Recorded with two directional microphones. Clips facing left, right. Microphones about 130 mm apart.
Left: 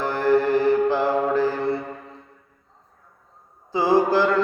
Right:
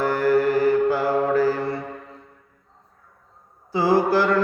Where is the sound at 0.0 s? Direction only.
25° left (ahead or behind).